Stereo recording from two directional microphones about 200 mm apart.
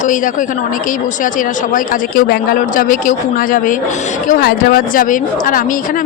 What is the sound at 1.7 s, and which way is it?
Speech, 50° left (ahead or behind).